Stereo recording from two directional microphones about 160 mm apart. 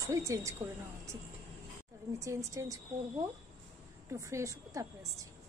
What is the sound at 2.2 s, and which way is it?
Speech, 20° right (ahead or behind).